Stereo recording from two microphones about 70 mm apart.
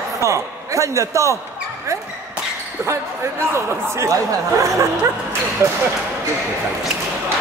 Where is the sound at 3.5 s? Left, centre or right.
Right.